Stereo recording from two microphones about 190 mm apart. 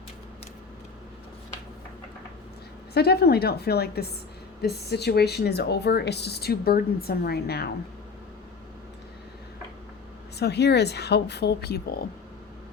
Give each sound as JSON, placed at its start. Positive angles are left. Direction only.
{"t": 2.9, "sound": "speech", "side_deg": 55}
{"t": 10.3, "sound": "speech", "side_deg": 60}